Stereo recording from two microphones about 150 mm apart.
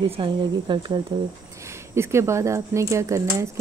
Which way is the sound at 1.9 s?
20° right (ahead or behind).